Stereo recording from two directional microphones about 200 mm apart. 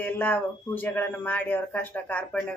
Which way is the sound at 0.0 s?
10° left (ahead or behind).